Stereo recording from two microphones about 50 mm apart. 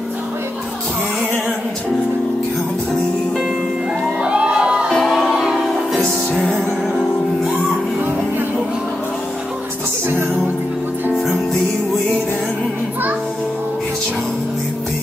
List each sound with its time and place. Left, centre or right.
4.0 s music: centre
5.1 s music: centre
6.4 s music: centre
10.0 s music: right